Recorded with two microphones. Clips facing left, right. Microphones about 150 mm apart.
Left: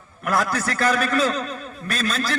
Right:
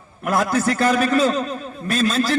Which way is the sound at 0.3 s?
25° right (ahead or behind).